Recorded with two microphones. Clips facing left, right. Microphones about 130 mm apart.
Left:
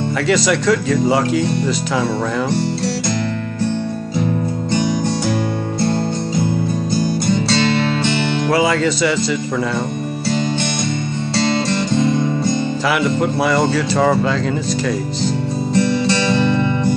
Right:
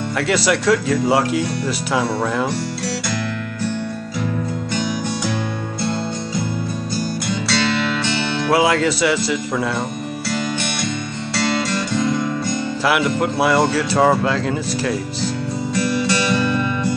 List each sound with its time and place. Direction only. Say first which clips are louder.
0.3 s speech: left 1 dB; 5° right (ahead or behind)
8.5 s speech: right 1 dB; 5° right (ahead or behind)
11.3 s music: left 3 dB; 25° left (ahead or behind)
12.8 s speech: right 1 dB; 5° right (ahead or behind)
15.7 s music: left 4 dB; 20° left (ahead or behind)